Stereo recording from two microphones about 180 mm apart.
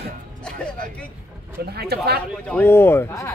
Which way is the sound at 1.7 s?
65° right (ahead or behind).